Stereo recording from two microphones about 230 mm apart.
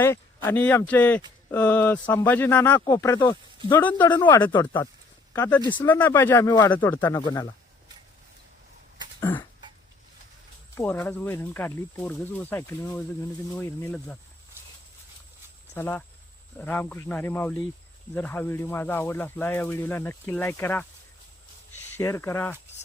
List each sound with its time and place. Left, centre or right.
0.0 s speech: centre
9.2 s speech: centre
10.8 s speech: centre
15.7 s speech: centre
21.9 s speech: centre